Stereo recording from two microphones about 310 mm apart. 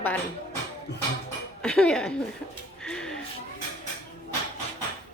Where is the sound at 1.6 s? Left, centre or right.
Centre.